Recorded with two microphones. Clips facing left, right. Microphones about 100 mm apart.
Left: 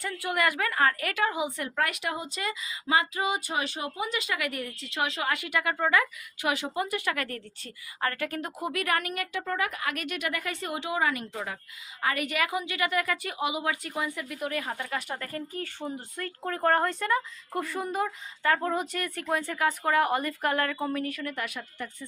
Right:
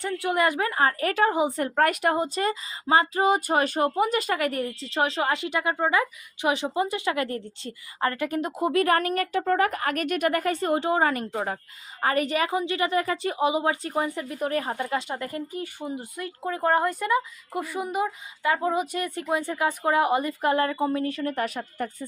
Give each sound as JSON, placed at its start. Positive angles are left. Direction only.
{"t": 0.0, "sound": "a woman's voice", "side_deg": -25}
{"t": 14.8, "sound": "speech", "side_deg": -25}